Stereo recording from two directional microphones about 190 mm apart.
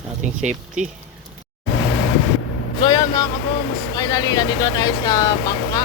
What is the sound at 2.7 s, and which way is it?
Speech, 20° left (ahead or behind).